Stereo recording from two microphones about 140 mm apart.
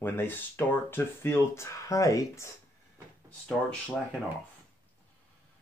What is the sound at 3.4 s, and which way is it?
Speech, 5° left (ahead or behind).